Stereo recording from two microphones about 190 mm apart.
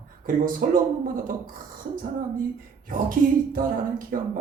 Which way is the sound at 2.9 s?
45° right (ahead or behind).